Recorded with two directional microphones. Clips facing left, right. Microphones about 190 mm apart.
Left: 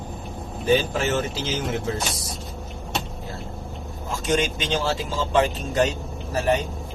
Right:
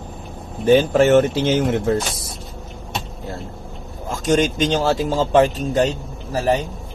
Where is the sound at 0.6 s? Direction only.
50° right (ahead or behind).